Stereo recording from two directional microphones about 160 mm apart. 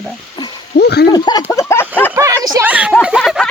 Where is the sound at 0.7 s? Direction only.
90° left.